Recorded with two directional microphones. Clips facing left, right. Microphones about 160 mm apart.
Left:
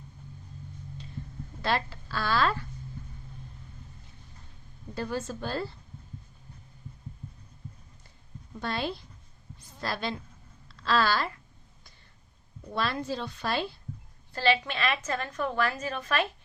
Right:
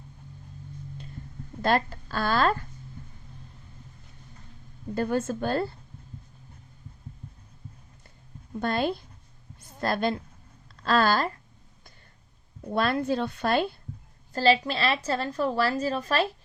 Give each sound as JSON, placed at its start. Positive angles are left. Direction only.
{"t": 1.6, "sound": "a woman's voice", "side_deg": -45}
{"t": 4.9, "sound": "a woman's voice", "side_deg": -55}
{"t": 8.6, "sound": "a woman's voice", "side_deg": -50}
{"t": 12.7, "sound": "a woman's voice", "side_deg": -55}
{"t": 14.3, "sound": "a woman's voice", "side_deg": -35}